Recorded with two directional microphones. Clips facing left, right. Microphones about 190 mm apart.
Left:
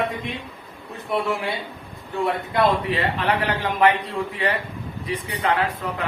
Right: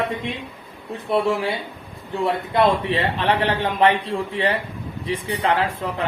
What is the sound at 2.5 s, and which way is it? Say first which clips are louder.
A man's voice: right 2 dB; 30° right (ahead or behind).